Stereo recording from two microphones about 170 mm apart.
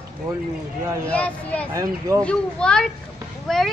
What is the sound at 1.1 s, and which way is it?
A child's voice, 10° left (ahead or behind).